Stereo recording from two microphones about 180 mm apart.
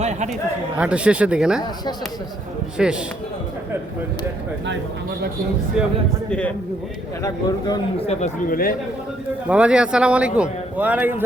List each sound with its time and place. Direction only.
0.0 s chatter: 40° right (ahead or behind)
0.8 s a man's voice: 5° right (ahead or behind)
2.8 s a man's voice: 5° right (ahead or behind)
7.2 s speech: 20° left (ahead or behind)
7.9 s speech: 35° left (ahead or behind)
8.4 s speech: 55° left (ahead or behind)
9.5 s a man's voice: 5° right (ahead or behind)